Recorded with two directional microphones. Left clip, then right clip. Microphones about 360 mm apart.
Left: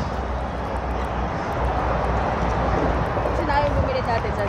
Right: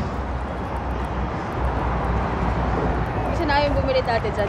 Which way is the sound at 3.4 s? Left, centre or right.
Right.